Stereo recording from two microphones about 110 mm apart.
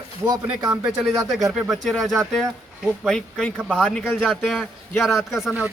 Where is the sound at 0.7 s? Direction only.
10° right (ahead or behind).